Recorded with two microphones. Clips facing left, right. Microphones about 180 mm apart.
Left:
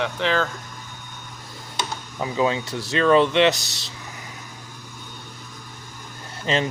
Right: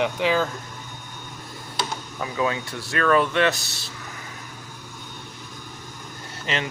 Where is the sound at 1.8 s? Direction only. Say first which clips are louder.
Left 1 dB; 25° left (ahead or behind).